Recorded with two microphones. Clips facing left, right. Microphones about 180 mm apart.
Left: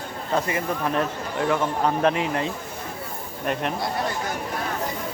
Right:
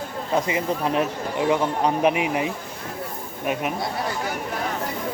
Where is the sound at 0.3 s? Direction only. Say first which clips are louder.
Right 2 dB; 15° right (ahead or behind).